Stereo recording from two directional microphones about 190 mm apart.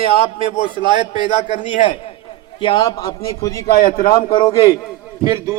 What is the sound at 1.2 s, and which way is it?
A man's voice, 30° left (ahead or behind).